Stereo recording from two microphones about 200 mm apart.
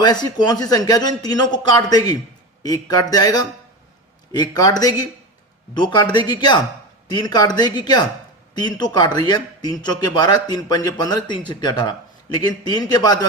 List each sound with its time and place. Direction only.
0.0 s a man's voice: 20° left (ahead or behind)